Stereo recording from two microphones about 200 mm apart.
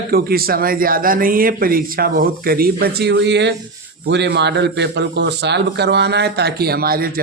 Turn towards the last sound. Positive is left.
turn(degrees=-50)  # may be behind; listen again after turning